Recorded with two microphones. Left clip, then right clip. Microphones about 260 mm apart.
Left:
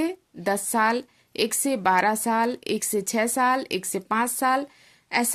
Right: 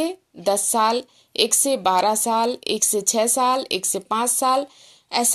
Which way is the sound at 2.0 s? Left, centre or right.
Left.